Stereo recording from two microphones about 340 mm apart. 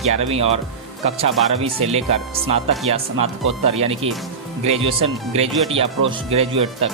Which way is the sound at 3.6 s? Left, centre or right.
Centre.